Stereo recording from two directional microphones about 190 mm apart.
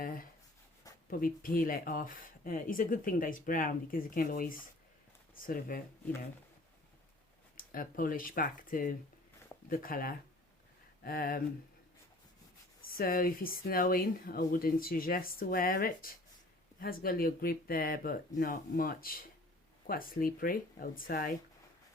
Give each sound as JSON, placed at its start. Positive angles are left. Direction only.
{"t": 0.0, "sound": "writing", "side_deg": 50}
{"t": 0.9, "sound": "writing", "side_deg": 20}
{"t": 1.2, "sound": "speech", "side_deg": 45}
{"t": 7.5, "sound": "speech", "side_deg": 50}
{"t": 12.9, "sound": "speech", "side_deg": 50}